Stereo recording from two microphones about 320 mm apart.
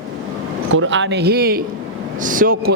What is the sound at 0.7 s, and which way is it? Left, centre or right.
A man's voice, right.